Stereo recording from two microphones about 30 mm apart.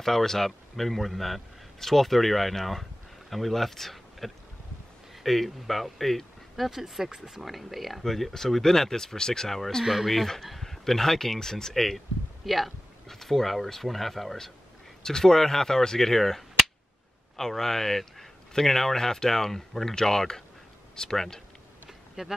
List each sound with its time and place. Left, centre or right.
0.0 s speech: centre
6.7 s speech: centre; by 9.5 s left
10.0 s speech: centre
12.4 s speech: centre
13.1 s speech: centre
15.0 s speech: centre
21.8 s a sound: centre